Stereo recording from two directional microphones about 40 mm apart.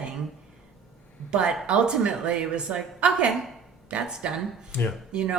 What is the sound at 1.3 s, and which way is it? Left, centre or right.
Speech, right.